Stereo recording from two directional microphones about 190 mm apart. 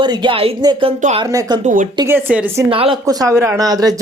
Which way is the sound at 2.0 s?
10° right (ahead or behind).